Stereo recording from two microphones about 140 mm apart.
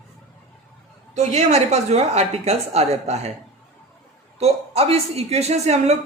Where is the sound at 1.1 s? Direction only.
50° right (ahead or behind).